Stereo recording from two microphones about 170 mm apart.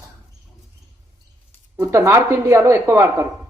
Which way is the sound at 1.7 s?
15° right (ahead or behind).